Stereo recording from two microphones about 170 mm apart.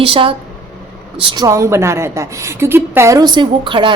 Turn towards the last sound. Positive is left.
turn(degrees=-30)  # may be behind; listen again after turning